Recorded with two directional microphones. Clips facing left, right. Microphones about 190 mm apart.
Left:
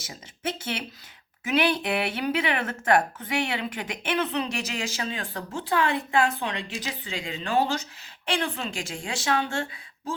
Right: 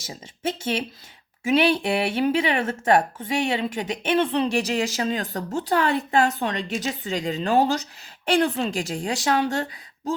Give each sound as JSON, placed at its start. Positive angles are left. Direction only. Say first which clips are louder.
{"t": 0.1, "sound": "a woman's voice", "louder": "right 4 dB", "side_deg": -25}